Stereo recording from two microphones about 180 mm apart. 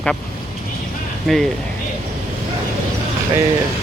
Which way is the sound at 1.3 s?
Centre (ahead or behind).